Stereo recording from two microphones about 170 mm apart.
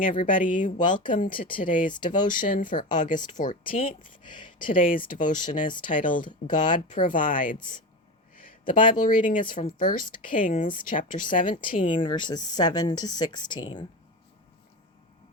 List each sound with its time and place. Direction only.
0.0 s speech: 55° left (ahead or behind)
12.0 s speech: 25° left (ahead or behind)